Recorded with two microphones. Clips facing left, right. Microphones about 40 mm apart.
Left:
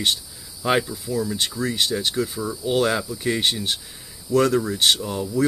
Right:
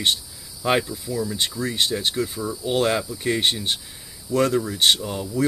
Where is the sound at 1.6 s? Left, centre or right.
Left.